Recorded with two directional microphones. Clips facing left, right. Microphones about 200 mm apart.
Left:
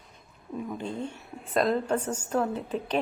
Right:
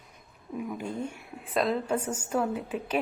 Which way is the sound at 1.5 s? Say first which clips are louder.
Left 2 dB; centre (ahead or behind).